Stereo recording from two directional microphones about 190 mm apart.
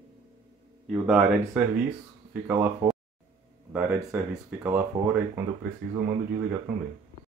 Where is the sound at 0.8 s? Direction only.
5° right (ahead or behind).